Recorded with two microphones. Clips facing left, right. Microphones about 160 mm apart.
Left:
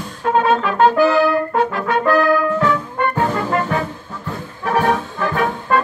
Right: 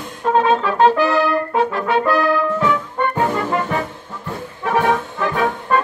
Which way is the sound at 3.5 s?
10° right (ahead or behind).